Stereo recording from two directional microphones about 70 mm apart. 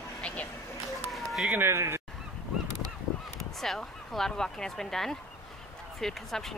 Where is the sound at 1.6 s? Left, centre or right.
Right.